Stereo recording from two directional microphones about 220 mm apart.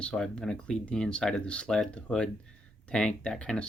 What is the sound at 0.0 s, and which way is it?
Speech, 5° left (ahead or behind).